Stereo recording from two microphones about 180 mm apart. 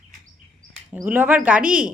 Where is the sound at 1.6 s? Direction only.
50° right (ahead or behind).